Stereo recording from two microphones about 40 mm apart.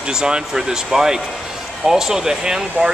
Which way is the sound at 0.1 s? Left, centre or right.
Centre.